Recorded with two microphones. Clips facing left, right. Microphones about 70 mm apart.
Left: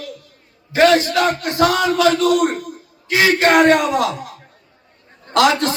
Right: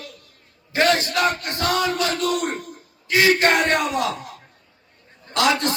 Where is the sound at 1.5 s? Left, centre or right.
Left.